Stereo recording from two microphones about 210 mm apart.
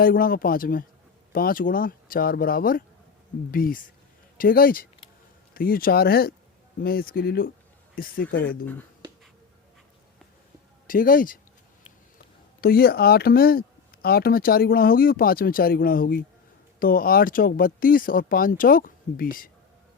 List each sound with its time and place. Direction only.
0.0 s speech: 45° left (ahead or behind)
8.3 s speech: 55° left (ahead or behind)
10.8 s speech: 40° left (ahead or behind)
12.6 s speech: 45° left (ahead or behind)